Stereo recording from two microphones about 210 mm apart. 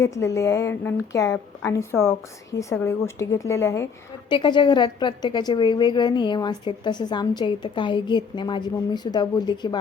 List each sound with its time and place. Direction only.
0.0 s a woman's voice: 15° left (ahead or behind)